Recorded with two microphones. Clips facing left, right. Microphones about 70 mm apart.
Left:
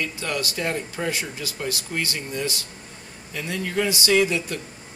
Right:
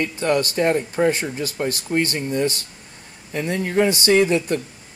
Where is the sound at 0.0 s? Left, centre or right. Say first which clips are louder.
Right 7 dB; right.